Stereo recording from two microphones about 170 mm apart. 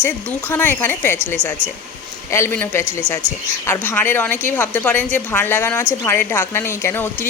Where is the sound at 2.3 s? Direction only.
15° left (ahead or behind).